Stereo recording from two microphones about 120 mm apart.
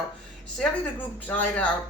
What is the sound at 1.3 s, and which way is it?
Speech, 10° left (ahead or behind).